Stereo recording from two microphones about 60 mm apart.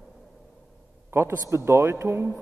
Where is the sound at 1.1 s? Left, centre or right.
Right.